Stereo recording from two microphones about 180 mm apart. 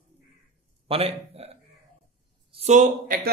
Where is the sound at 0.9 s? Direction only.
30° right (ahead or behind).